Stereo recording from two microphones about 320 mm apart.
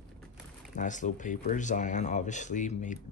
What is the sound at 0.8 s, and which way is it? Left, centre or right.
Speech, left.